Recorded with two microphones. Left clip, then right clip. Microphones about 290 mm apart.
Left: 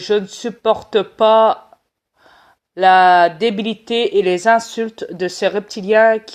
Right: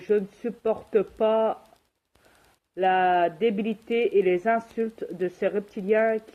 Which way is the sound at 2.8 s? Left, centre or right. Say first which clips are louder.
Left 12 dB; left.